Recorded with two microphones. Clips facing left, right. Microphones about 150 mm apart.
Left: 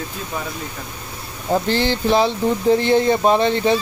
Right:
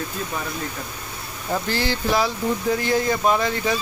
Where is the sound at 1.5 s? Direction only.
25° left (ahead or behind).